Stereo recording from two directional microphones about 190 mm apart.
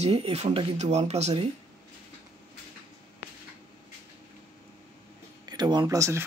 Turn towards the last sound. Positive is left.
turn(degrees=-15)  # may be behind; listen again after turning